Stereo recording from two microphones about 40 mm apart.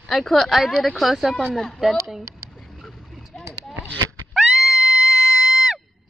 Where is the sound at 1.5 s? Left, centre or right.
Centre.